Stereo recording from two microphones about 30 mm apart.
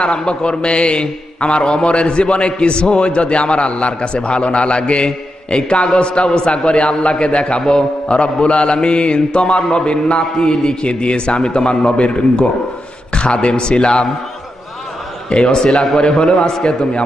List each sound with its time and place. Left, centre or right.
0.0 s a man's voice: left
15.2 s a man's voice: left
15.7 s a man's voice: centre
16.2 s a man's voice: left